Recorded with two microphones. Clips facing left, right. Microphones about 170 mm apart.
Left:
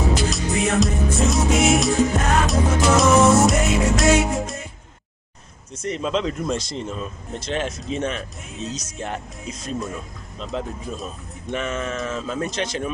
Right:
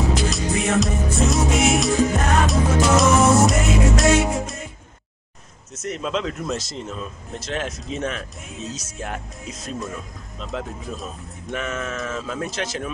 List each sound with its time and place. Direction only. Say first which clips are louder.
0.1 s music: even; centre (ahead or behind)
5.8 s speech: left 2 dB; centre (ahead or behind)
10.4 s speech: left 2 dB; centre (ahead or behind)